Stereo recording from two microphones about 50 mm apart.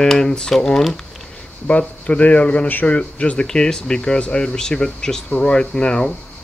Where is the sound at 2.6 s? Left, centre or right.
Left.